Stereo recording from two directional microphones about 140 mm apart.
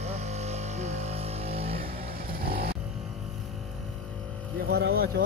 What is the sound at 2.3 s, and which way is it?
Vehicle, 90° right.